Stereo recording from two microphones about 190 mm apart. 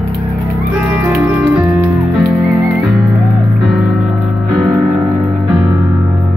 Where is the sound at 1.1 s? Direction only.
10° right (ahead or behind).